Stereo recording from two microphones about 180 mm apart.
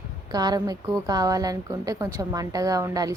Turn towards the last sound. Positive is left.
turn(degrees=-20)  # may be behind; listen again after turning